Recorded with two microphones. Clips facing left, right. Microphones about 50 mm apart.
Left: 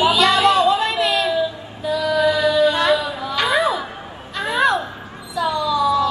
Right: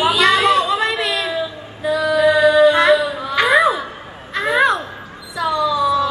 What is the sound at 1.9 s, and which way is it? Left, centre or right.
Music, right.